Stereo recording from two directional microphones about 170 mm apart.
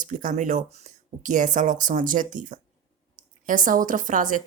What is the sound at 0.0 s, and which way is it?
Speech, 50° right (ahead or behind).